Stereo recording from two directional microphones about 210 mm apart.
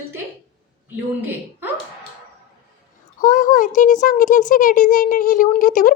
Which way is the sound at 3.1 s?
40° left (ahead or behind).